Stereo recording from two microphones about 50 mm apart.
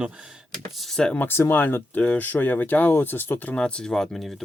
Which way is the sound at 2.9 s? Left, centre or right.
Left.